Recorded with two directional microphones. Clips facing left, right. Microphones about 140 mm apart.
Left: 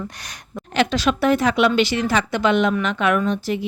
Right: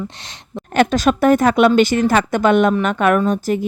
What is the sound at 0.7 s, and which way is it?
Speech, 50° right (ahead or behind).